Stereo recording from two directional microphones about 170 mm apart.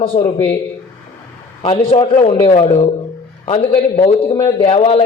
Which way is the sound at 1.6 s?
35° left (ahead or behind).